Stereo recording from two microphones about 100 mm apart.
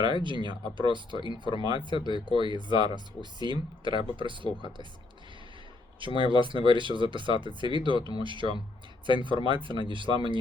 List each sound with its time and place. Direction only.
0.0 s speech: 55° right (ahead or behind)
1.2 s speech: 50° left (ahead or behind)
1.5 s speech: 55° right (ahead or behind)
6.1 s speech: 55° right (ahead or behind)